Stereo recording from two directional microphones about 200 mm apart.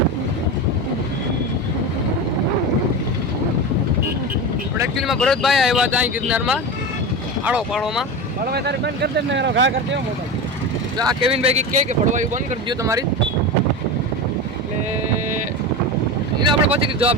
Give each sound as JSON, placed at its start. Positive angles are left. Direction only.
{"t": 4.9, "sound": "speech", "side_deg": 0}
{"t": 8.4, "sound": "speech", "side_deg": -55}
{"t": 10.9, "sound": "speech", "side_deg": -20}
{"t": 12.6, "sound": "speech", "side_deg": -15}
{"t": 16.4, "sound": "speech", "side_deg": -25}